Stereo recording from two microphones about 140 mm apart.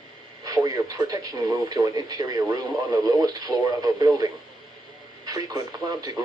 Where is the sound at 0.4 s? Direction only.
25° right (ahead or behind).